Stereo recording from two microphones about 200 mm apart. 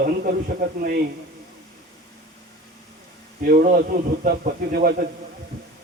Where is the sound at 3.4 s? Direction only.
45° right (ahead or behind).